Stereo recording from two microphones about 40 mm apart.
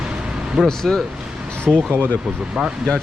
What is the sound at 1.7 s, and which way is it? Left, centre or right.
Speech, right.